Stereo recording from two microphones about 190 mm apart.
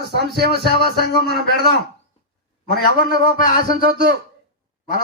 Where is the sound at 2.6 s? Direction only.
50° left (ahead or behind).